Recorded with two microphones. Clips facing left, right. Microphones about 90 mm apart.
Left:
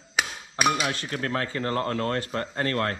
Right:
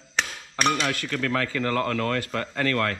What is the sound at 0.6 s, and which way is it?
Speech, 10° left (ahead or behind).